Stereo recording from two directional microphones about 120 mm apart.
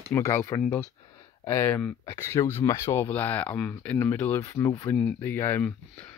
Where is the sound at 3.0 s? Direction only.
15° left (ahead or behind).